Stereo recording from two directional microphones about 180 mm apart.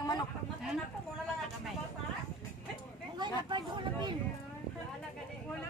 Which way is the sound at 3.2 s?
25° right (ahead or behind).